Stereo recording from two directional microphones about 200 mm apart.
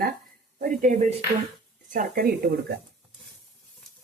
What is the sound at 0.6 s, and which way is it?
A woman's voice, 40° right (ahead or behind).